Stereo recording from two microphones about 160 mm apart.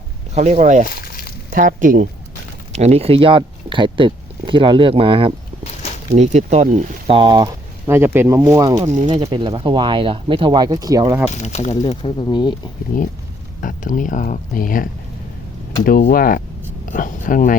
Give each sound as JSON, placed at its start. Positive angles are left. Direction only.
{"t": 0.3, "sound": "speech", "side_deg": -45}
{"t": 0.9, "sound": "a sound", "side_deg": 70}
{"t": 1.5, "sound": "speech", "side_deg": -55}
{"t": 2.7, "sound": "speech", "side_deg": -40}
{"t": 6.1, "sound": "speech", "side_deg": -45}
{"t": 7.1, "sound": "speech", "side_deg": -30}
{"t": 8.8, "sound": "speech", "side_deg": -45}
{"t": 9.2, "sound": "speech", "side_deg": -30}
{"t": 11.3, "sound": "speech", "side_deg": 45}
{"t": 12.0, "sound": "speech", "side_deg": 30}
{"t": 12.9, "sound": "speech", "side_deg": 60}